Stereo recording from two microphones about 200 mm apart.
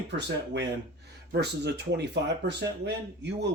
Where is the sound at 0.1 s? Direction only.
60° right (ahead or behind).